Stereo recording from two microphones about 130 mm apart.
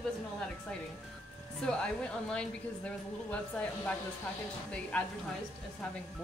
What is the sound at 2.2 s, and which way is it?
Speech, 10° left (ahead or behind).